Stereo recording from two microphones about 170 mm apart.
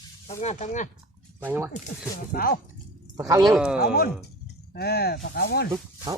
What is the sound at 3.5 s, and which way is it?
Speech, 5° right (ahead or behind).